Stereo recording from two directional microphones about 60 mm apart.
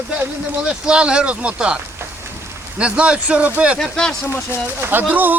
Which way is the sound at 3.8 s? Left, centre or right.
Centre.